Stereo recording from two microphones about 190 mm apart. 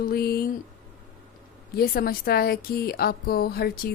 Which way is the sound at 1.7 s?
50° left (ahead or behind).